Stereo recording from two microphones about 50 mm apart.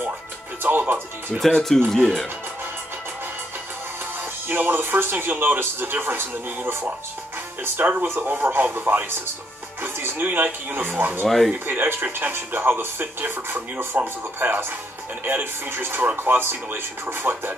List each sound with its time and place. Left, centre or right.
0.7 s speech: right
1.5 s speech: centre
4.5 s speech: right
11.2 s speech: centre
11.6 s speech: right